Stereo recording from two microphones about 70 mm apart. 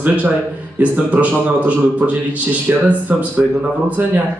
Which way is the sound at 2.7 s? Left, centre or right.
Right.